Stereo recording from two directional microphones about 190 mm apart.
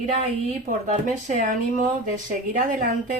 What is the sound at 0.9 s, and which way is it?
Speech, 40° right (ahead or behind).